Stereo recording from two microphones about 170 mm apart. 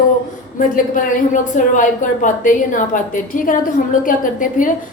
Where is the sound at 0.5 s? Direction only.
50° left (ahead or behind).